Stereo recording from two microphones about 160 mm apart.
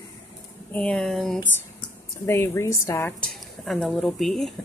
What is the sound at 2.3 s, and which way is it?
Speech, 15° left (ahead or behind).